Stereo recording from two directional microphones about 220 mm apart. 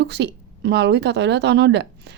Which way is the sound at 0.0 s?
50° right (ahead or behind).